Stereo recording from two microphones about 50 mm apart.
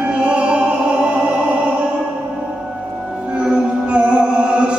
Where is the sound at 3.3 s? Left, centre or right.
Centre.